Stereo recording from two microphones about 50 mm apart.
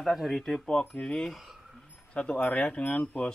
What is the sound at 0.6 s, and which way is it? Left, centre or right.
Speech, centre.